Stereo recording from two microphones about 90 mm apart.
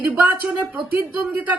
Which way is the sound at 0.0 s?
15° right (ahead or behind).